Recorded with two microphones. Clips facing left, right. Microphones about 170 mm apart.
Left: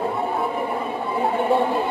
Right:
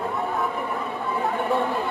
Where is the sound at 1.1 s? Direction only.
30° left (ahead or behind).